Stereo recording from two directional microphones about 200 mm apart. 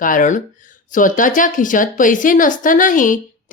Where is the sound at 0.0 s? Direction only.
40° left (ahead or behind).